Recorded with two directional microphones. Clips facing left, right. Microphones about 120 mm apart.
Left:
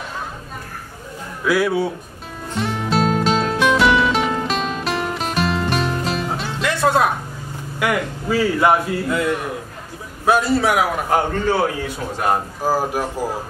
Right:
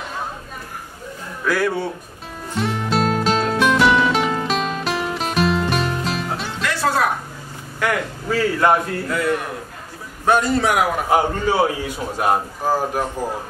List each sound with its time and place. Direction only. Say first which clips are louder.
1.4 s a man's voice: left 3 dB; 10° left (ahead or behind)
2.5 s music: even; centre (ahead or behind)
6.6 s music: left 3 dB; 20° left (ahead or behind)
7.8 s a man's voice: left 1 dB; 10° left (ahead or behind)
10.2 s a man's voice: left 1 dB; 5° left (ahead or behind)
11.1 s a man's voice: even; 10° right (ahead or behind)
12.6 s a man's voice: left 1 dB; 5° left (ahead or behind)